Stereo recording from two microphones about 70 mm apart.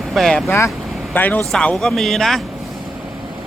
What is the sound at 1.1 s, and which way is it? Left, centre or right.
Speech, left.